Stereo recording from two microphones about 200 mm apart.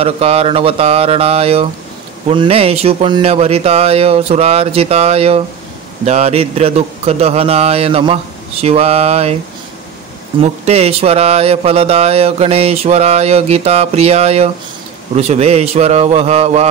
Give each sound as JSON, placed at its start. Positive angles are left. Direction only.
{"t": 0.0, "sound": "speech", "side_deg": -30}
{"t": 10.4, "sound": "speech", "side_deg": -35}